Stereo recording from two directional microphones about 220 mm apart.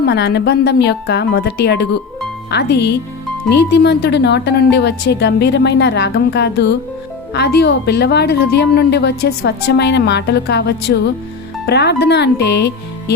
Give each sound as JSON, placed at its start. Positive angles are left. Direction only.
{"t": 0.1, "sound": "a woman's voice", "side_deg": 50}